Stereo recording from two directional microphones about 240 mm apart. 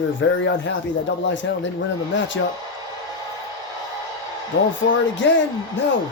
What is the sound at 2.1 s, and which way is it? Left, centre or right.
Speech, left.